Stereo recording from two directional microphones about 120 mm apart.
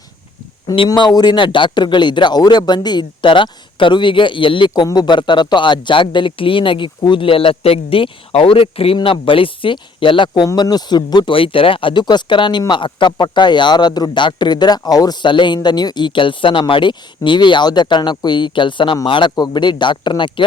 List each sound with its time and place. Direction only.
0.9 s speech: 35° left (ahead or behind)
10.4 s speech: 35° left (ahead or behind)